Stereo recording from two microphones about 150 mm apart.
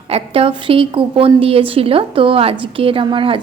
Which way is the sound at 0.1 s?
40° right (ahead or behind).